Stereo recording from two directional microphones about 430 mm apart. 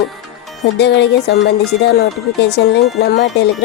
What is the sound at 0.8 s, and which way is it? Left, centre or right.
Speech, left.